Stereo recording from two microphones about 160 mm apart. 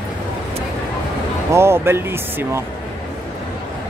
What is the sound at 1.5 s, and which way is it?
Speech, 15° right (ahead or behind).